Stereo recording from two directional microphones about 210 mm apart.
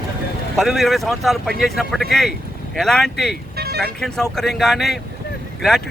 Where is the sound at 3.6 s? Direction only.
50° right (ahead or behind).